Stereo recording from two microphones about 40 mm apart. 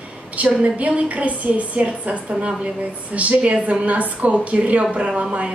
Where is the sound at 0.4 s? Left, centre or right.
Right.